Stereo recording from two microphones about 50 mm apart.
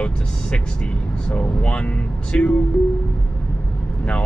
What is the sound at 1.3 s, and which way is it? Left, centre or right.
Speech, left.